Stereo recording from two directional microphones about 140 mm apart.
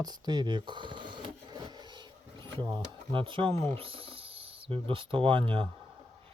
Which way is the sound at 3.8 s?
40° right (ahead or behind).